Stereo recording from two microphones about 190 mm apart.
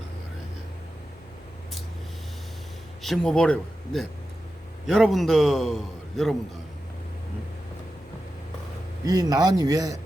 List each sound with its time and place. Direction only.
3.0 s a man's voice: centre (ahead or behind)
9.0 s a man's voice: 20° right (ahead or behind)